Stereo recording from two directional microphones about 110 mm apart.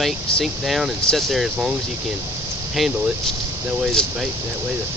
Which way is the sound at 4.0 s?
5° left (ahead or behind).